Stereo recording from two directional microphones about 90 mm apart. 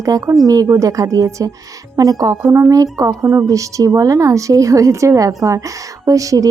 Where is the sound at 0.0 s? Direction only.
40° right (ahead or behind).